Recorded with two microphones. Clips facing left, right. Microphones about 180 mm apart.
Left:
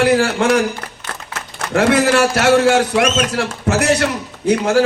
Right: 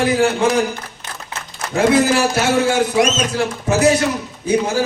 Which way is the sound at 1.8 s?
75° left (ahead or behind).